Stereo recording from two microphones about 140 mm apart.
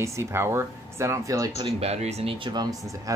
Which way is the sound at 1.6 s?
45° right (ahead or behind).